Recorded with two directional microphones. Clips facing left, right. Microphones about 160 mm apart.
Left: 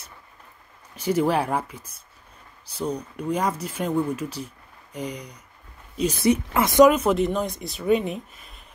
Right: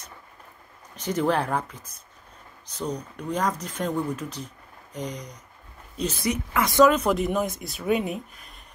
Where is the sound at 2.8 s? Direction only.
10° left (ahead or behind).